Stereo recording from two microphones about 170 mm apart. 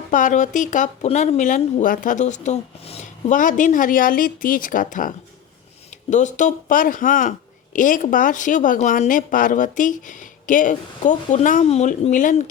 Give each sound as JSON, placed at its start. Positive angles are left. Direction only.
{"t": 0.1, "sound": "speech", "side_deg": 50}